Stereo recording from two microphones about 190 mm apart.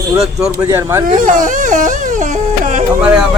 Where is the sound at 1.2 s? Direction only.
45° right (ahead or behind).